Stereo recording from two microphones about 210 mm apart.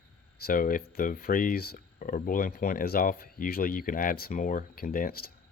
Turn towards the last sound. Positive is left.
turn(degrees=45)  # may be behind; listen again after turning